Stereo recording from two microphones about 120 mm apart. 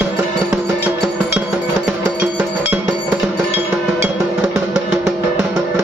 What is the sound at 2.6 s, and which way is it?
Music, 15° right (ahead or behind).